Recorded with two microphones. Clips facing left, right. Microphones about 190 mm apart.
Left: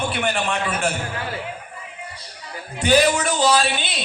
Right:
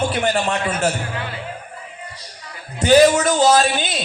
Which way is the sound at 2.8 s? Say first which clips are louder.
Right 5 dB; 40° right (ahead or behind).